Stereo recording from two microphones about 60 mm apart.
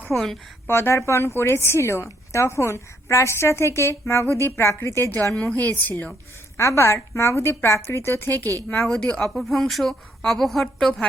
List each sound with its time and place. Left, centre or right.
0.1 s a woman's voice: centre
0.7 s a woman's voice: left
4.7 s a woman's voice: left
5.4 s a woman's voice: left
6.6 s a woman's voice: left
9.0 s a woman's voice: centre
9.2 s a woman's voice: centre